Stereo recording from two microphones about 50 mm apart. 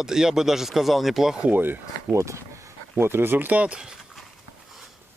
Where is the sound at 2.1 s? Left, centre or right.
Right.